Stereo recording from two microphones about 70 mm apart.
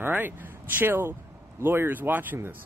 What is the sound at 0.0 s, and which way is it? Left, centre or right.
Speech, right.